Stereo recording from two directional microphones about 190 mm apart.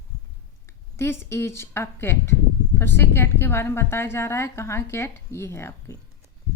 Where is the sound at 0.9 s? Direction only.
15° left (ahead or behind).